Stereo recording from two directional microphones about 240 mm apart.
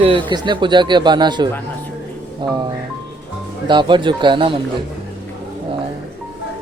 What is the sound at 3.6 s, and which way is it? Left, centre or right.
Speech, centre.